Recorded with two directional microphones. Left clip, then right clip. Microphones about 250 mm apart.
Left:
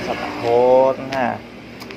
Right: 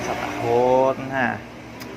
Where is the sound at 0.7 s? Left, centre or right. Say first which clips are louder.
Left 4 dB; right.